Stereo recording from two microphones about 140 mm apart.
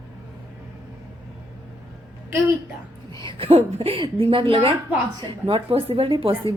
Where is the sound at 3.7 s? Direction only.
45° right (ahead or behind).